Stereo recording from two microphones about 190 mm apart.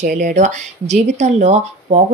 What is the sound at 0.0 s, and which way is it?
Speech, 40° right (ahead or behind).